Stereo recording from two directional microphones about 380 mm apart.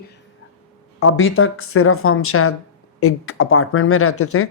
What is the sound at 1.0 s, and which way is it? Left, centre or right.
Speech, left.